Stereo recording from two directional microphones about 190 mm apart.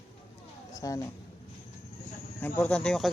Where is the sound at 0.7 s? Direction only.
20° left (ahead or behind).